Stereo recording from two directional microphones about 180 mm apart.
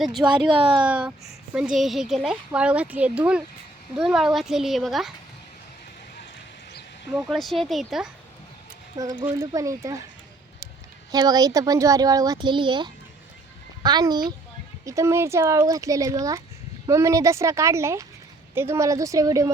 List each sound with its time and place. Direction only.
0.0 s speech: centre (ahead or behind)
0.4 s a child's voice: 30° right (ahead or behind)
0.8 s speech: 5° right (ahead or behind)
7.3 s speech: centre (ahead or behind)
9.2 s speech: 15° right (ahead or behind)
11.1 s a child's voice: 20° right (ahead or behind)